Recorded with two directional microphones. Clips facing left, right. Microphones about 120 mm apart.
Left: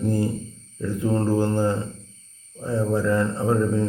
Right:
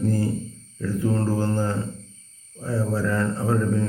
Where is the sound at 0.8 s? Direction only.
20° left (ahead or behind).